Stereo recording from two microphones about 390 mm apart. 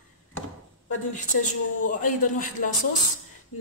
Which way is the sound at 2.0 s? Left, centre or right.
Centre.